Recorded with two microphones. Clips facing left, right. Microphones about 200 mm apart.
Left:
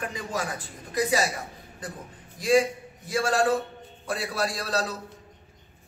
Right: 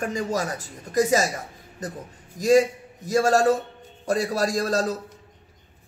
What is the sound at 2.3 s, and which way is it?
A man's voice, 40° right (ahead or behind).